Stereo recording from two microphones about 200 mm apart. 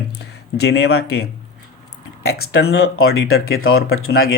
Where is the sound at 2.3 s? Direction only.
90° left.